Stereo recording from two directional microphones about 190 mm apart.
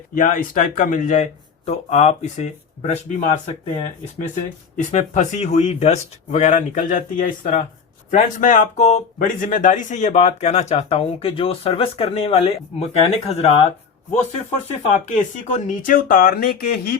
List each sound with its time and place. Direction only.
0.1 s speech: 45° left (ahead or behind)
4.8 s speech: 40° left (ahead or behind)
14.9 s speech: 40° left (ahead or behind)